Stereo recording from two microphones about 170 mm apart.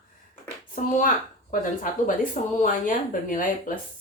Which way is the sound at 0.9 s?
50° left (ahead or behind).